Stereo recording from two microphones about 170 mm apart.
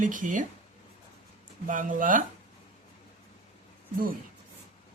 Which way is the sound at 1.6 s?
50° right (ahead or behind).